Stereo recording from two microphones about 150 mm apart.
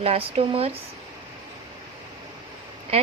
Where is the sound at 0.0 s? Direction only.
40° right (ahead or behind).